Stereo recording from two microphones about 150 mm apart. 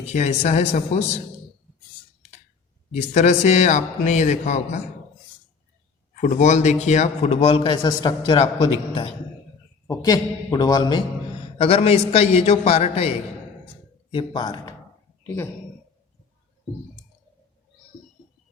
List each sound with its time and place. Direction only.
0.1 s a man's voice: 50° left (ahead or behind)
2.9 s a man's voice: 50° left (ahead or behind)
6.1 s a man's voice: 55° left (ahead or behind); by 9.1 s 40° left (ahead or behind)
9.8 s a man's voice: 25° left (ahead or behind); by 13.1 s 45° left (ahead or behind)
14.1 s speech: 35° left (ahead or behind)